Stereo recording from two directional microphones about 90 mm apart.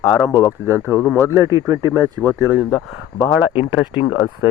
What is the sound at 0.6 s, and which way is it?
Speech, 25° right (ahead or behind).